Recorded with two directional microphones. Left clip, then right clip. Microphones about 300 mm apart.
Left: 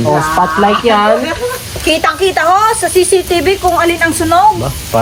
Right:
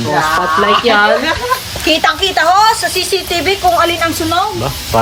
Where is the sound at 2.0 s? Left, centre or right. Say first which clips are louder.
Left 1 dB; left.